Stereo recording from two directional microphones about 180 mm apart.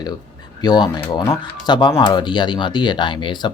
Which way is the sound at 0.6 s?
25° left (ahead or behind).